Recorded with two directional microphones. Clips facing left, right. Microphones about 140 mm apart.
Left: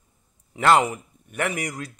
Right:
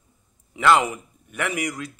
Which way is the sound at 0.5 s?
40° left (ahead or behind).